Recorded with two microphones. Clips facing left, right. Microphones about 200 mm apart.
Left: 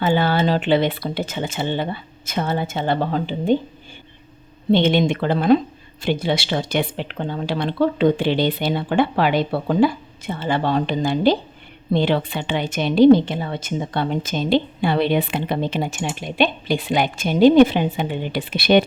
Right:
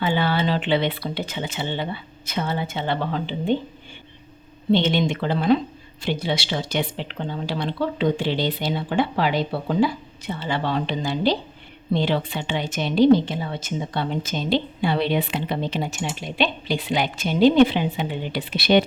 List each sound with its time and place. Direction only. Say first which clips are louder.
0.0 s a woman's voice: left 4 dB; 45° left (ahead or behind)
4.7 s a woman's voice: left 3 dB; 55° left (ahead or behind)